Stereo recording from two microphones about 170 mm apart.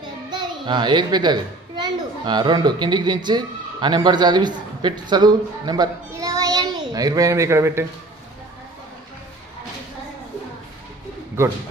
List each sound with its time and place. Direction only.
0.3 s a woman's voice: 25° right (ahead or behind)